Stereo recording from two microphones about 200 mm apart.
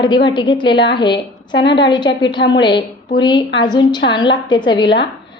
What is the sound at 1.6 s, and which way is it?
Speech, 60° left (ahead or behind).